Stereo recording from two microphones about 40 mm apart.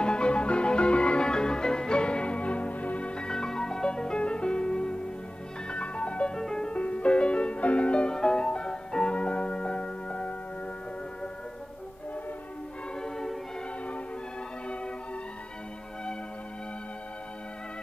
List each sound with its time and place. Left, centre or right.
0.0 s marimba: left
5.7 s music: left
6.3 s music: centre
6.7 s music: left
8.2 s music: centre